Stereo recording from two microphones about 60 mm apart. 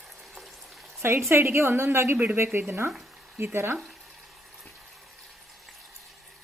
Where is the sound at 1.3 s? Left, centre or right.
Right.